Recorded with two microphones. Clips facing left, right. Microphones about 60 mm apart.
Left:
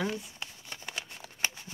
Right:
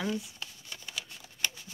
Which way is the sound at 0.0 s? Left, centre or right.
Left.